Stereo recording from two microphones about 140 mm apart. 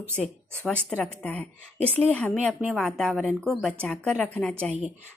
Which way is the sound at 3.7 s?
10° left (ahead or behind).